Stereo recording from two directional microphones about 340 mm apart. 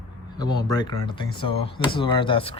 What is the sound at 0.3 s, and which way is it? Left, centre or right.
Speech, centre.